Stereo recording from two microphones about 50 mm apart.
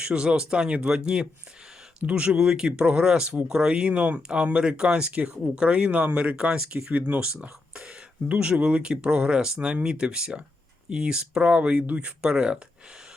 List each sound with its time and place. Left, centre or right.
0.0 s speech: right
6.9 s speech: right